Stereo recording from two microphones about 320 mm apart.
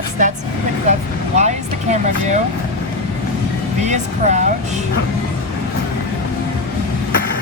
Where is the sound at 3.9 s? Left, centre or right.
Right.